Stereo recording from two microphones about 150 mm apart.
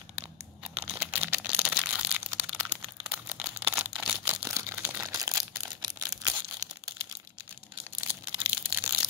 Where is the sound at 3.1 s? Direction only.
15° right (ahead or behind).